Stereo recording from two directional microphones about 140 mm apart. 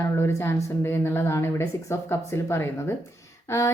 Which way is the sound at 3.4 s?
20° left (ahead or behind).